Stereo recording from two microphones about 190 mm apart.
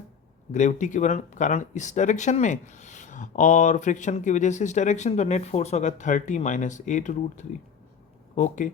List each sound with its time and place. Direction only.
0.5 s speech: 40° left (ahead or behind)